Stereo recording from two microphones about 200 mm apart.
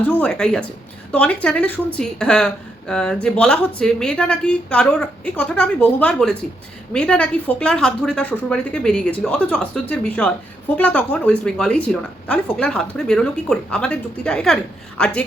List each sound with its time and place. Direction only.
0.1 s speech: 5° left (ahead or behind)